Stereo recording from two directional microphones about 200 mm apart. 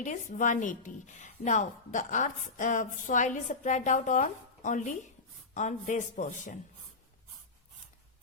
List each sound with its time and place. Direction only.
0.0 s a woman's voice: 40° left (ahead or behind)